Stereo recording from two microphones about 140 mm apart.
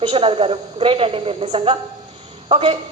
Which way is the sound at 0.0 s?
40° right (ahead or behind).